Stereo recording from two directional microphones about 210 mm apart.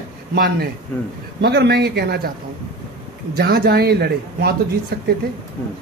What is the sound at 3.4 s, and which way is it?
Speech, 50° right (ahead or behind).